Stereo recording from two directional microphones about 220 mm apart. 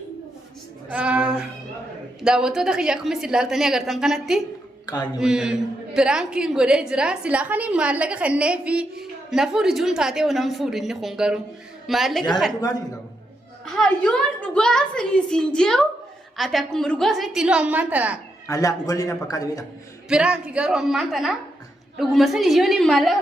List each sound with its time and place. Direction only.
0.9 s a sound: 5° right (ahead or behind)
2.2 s a man's voice: 5° right (ahead or behind)
13.7 s a man's voice: centre (ahead or behind)
18.4 s a man's voice: 15° left (ahead or behind)
20.1 s a man's voice: 5° right (ahead or behind)